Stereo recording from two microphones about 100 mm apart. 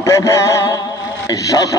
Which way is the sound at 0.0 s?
30° left (ahead or behind).